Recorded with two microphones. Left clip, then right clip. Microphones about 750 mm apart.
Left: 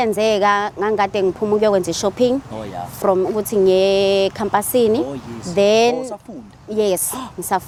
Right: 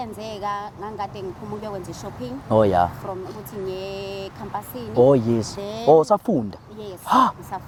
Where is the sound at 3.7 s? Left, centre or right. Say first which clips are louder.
Left 17 dB; left.